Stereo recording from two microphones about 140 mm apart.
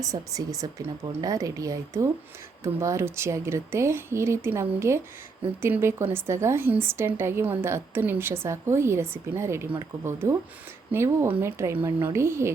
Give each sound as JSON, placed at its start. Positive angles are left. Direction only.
{"t": 0.0, "sound": "a woman's voice", "side_deg": -25}